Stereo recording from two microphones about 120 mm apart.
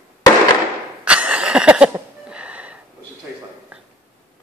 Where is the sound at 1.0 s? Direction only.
10° right (ahead or behind).